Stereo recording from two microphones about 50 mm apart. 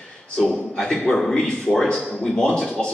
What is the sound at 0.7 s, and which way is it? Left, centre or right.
Speech, centre.